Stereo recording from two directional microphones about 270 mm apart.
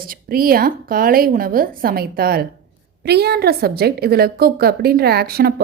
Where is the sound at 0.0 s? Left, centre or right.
Right.